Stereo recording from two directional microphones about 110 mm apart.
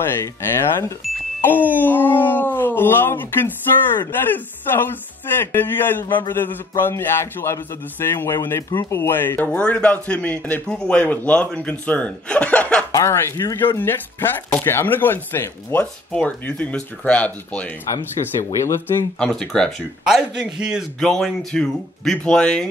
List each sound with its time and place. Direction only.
1.4 s a man's voice: 15° left (ahead or behind)
12.9 s a man's voice: 25° left (ahead or behind)
17.9 s speech: 25° left (ahead or behind)
19.1 s a man's voice: 5° left (ahead or behind)
20.1 s a man's voice: 5° right (ahead or behind)